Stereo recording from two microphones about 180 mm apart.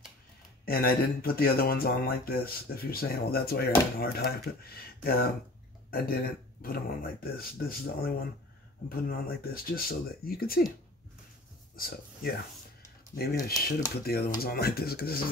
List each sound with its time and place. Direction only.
0.7 s speech: 55° left (ahead or behind)
11.7 s speech: 55° left (ahead or behind)